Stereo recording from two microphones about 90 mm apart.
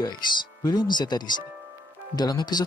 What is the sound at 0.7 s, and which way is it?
Speech, 55° left (ahead or behind).